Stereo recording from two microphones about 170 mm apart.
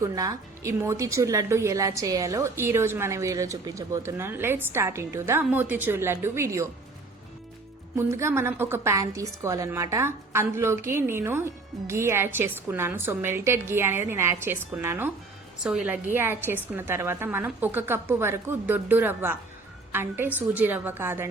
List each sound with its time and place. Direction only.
0.0 s a woman's voice: 20° right (ahead or behind)
7.9 s a woman's voice: 15° right (ahead or behind)